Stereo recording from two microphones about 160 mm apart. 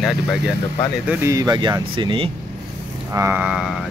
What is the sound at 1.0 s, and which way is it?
Speech, 20° right (ahead or behind).